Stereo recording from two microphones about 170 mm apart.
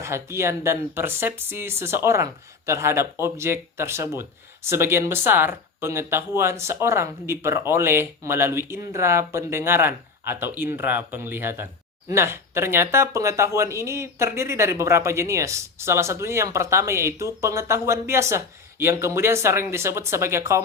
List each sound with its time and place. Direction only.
0.0 s speech: 15° right (ahead or behind)